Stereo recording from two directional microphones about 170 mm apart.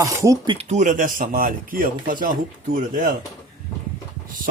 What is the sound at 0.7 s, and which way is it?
Speech, 45° right (ahead or behind).